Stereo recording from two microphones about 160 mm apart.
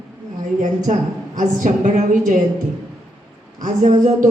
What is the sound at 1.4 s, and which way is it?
A woman's voice, 50° right (ahead or behind).